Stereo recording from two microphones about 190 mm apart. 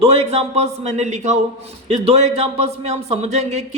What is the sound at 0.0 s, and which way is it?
Speech, 30° right (ahead or behind).